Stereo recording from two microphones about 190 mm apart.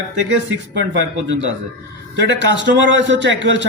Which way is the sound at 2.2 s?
70° right (ahead or behind).